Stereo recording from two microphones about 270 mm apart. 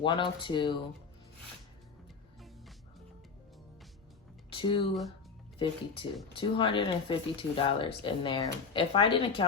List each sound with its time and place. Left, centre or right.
0.0 s speech: centre
4.4 s music: centre
5.5 s speech: centre